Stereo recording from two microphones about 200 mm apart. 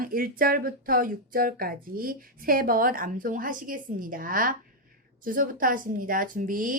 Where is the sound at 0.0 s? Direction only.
45° right (ahead or behind).